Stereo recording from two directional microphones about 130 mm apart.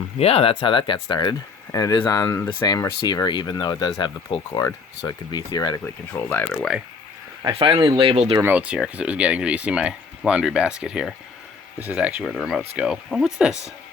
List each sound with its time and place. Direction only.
0.2 s speech: 50° left (ahead or behind); by 5.8 s 30° left (ahead or behind)
5.8 s speech: 15° left (ahead or behind)
7.5 s speech: 40° right (ahead or behind)
8.0 s speech: 45° right (ahead or behind)
8.4 s speech: 15° right (ahead or behind)